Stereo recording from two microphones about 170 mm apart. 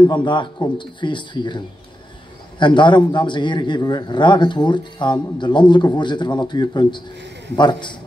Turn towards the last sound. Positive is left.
turn(degrees=25)  # may be behind; listen again after turning